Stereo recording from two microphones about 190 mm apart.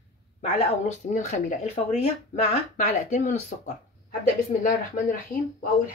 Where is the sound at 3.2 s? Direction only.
40° left (ahead or behind).